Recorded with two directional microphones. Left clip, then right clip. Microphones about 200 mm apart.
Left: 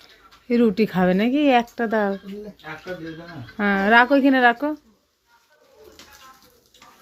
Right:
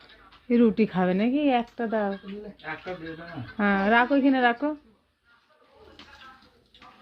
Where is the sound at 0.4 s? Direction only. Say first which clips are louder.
Left 3 dB; 10° left (ahead or behind); by 2.1 s 25° left (ahead or behind).